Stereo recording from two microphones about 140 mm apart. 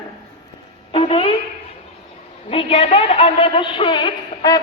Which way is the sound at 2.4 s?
45° left (ahead or behind).